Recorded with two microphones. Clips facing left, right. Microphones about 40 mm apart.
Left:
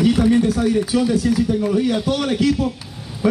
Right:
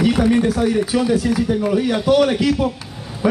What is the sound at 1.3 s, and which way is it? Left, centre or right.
Speech, right.